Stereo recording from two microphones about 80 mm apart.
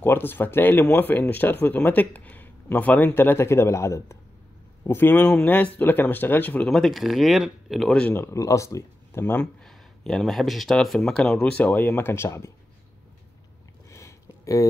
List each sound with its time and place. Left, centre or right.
0.0 s speech: left
3.1 s speech: left
5.2 s speech: centre
6.7 s speech: centre
8.1 s speech: left
9.2 s speech: centre
9.6 s speech: centre; by 12.5 s left
13.8 s a sound: left